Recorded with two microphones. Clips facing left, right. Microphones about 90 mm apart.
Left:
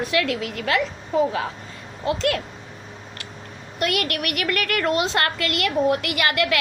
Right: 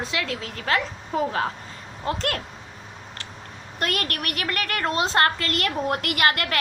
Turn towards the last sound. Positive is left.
turn(degrees=-45)  # may be behind; listen again after turning